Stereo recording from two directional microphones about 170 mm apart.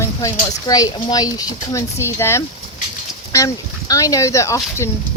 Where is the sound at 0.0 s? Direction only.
20° left (ahead or behind).